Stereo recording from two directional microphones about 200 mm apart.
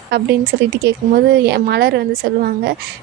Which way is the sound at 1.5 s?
55° right (ahead or behind).